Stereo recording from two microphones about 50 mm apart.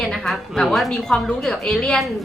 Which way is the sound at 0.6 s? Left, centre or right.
Centre.